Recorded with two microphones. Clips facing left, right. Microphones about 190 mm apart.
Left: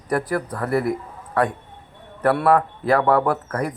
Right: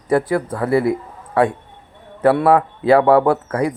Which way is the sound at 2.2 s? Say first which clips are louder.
Right 4 dB; 25° right (ahead or behind).